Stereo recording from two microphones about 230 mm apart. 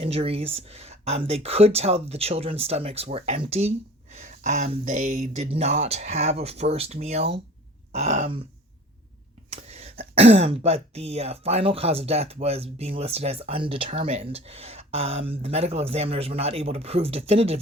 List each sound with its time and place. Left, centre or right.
0.0 s speech: right
7.9 s a sound: right
9.5 s speech: right